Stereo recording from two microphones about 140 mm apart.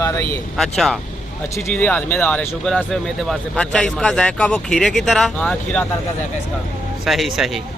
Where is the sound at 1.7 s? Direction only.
10° left (ahead or behind).